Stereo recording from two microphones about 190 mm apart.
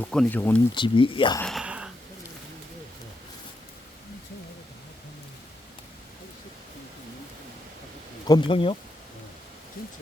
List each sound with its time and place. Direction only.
0.0 s speech: 5° left (ahead or behind)
0.7 s speech: 25° left (ahead or behind)
1.4 s a sound: centre (ahead or behind)
8.3 s speech: 25° left (ahead or behind)